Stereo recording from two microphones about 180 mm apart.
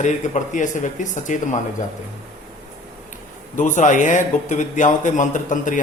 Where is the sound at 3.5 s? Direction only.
45° left (ahead or behind).